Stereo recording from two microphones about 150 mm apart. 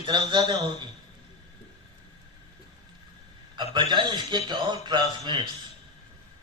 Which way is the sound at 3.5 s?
30° right (ahead or behind).